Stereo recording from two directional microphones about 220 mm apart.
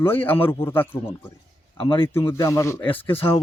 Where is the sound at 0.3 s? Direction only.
10° left (ahead or behind).